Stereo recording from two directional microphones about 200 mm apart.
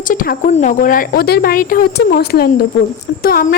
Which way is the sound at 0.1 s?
45° left (ahead or behind).